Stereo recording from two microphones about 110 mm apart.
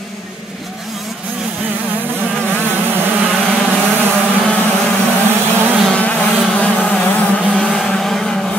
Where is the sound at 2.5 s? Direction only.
20° right (ahead or behind).